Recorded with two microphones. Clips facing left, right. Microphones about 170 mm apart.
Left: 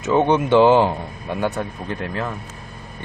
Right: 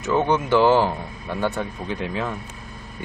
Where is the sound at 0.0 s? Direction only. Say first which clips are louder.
Left 3 dB; 20° left (ahead or behind).